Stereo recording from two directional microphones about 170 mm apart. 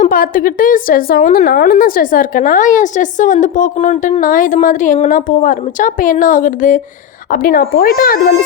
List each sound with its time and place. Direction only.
0.0 s speech: 55° left (ahead or behind)